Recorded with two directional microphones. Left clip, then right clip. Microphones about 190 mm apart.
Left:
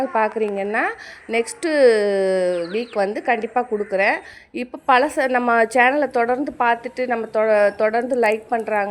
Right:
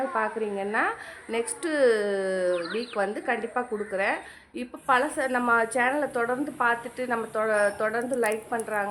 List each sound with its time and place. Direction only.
0.1 s a woman's voice: 35° left (ahead or behind)